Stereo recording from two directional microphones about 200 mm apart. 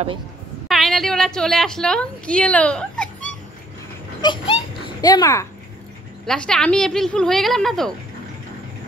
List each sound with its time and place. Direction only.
0.7 s a woman's voice: centre (ahead or behind)
4.2 s a child's voice: 25° left (ahead or behind)
6.2 s a woman's voice: 5° left (ahead or behind)